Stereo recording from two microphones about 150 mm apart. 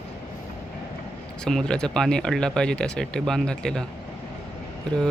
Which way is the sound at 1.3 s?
5° left (ahead or behind).